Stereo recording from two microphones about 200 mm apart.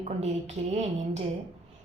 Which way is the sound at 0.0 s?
35° right (ahead or behind).